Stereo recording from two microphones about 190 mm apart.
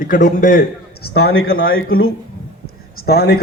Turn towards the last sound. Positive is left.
turn(degrees=55)  # may be behind; listen again after turning